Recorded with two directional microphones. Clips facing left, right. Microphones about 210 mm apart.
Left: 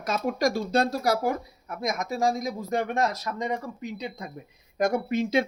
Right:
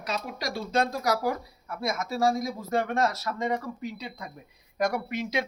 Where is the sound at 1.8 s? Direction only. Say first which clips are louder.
Even; 15° left (ahead or behind).